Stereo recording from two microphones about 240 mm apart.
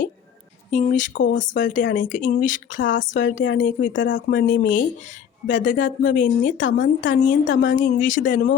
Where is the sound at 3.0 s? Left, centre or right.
Left.